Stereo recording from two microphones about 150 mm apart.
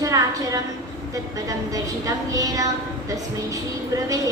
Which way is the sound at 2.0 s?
20° right (ahead or behind).